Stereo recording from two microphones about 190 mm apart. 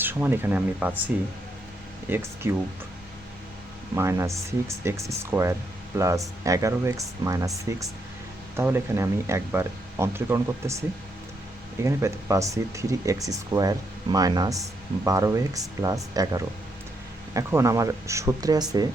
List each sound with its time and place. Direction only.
0.0 s speech: 10° right (ahead or behind)
2.0 s speech: 10° right (ahead or behind)
3.9 s speech: 15° right (ahead or behind)